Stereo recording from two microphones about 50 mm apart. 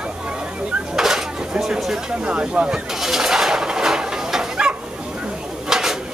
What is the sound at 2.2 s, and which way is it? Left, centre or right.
Speech, centre.